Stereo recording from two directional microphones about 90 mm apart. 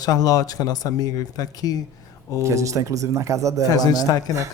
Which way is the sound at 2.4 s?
35° right (ahead or behind).